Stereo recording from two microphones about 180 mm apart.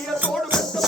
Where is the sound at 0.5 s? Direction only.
Centre (ahead or behind).